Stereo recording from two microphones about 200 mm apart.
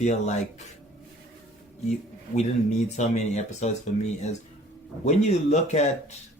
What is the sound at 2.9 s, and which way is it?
Speech, 35° left (ahead or behind).